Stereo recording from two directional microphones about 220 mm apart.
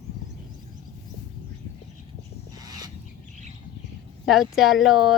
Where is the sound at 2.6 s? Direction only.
15° right (ahead or behind).